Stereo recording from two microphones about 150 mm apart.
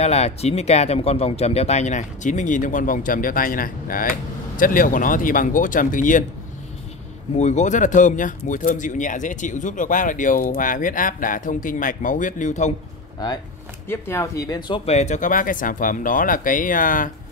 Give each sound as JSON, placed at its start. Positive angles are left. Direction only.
{"t": 0.0, "sound": "speech", "side_deg": 45}
{"t": 7.3, "sound": "speech", "side_deg": 50}
{"t": 13.8, "sound": "speech", "side_deg": 15}
{"t": 14.7, "sound": "speech", "side_deg": 45}